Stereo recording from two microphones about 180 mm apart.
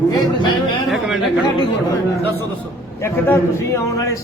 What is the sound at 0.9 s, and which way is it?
Chatter, 5° right (ahead or behind).